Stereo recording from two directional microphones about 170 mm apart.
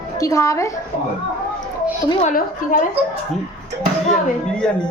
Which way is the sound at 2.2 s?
50° left (ahead or behind).